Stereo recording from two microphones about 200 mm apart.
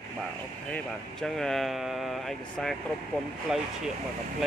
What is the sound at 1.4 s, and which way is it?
Speech, centre (ahead or behind).